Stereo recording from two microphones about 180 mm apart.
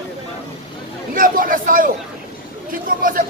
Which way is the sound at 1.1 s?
50° right (ahead or behind).